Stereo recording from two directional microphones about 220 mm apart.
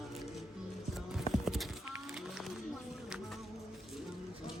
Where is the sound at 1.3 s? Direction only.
Centre (ahead or behind).